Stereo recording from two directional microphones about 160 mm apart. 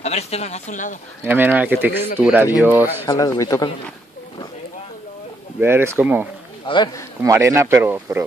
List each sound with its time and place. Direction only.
0.0 s speech: 40° left (ahead or behind)
1.2 s speech: 10° right (ahead or behind)
3.1 s speech: 20° left (ahead or behind)
5.6 s speech: 10° right (ahead or behind)
6.6 s speech: 30° left (ahead or behind)
7.2 s speech: 20° right (ahead or behind)